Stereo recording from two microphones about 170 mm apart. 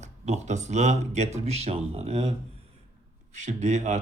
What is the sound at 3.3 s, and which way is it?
Speech, 45° right (ahead or behind).